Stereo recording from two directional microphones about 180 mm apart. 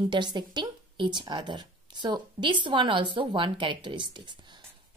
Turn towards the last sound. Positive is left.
turn(degrees=-25)  # may be behind; listen again after turning